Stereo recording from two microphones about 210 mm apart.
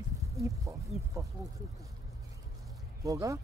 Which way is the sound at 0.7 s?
15° right (ahead or behind).